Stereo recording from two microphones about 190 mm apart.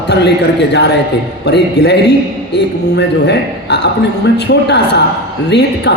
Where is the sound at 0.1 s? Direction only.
65° left (ahead or behind).